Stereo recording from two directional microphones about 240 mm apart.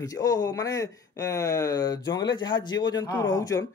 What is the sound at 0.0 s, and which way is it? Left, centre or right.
A man's voice, centre.